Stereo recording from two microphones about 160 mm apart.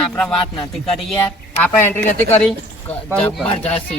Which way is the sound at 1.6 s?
10° left (ahead or behind).